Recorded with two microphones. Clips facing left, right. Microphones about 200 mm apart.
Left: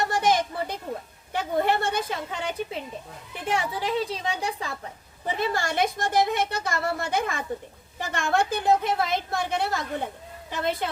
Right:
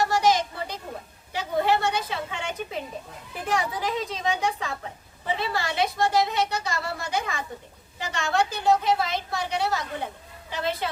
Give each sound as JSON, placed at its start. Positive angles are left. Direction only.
{"t": 0.1, "sound": "a sound", "side_deg": 55}
{"t": 1.3, "sound": "a woman's voice", "side_deg": 55}
{"t": 3.4, "sound": "a woman's voice", "side_deg": 25}
{"t": 5.4, "sound": "a woman's voice", "side_deg": 45}